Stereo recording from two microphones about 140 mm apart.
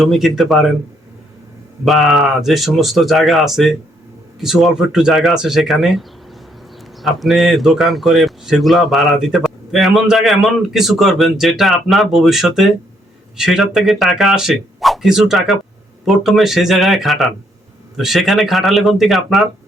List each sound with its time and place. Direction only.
0.0 s speech: centre (ahead or behind)
1.8 s speech: centre (ahead or behind)